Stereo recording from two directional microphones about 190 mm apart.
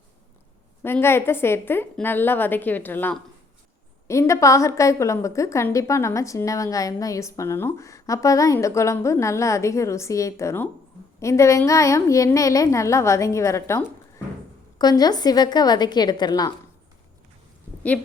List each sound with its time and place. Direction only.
0.8 s a woman's voice: 10° left (ahead or behind)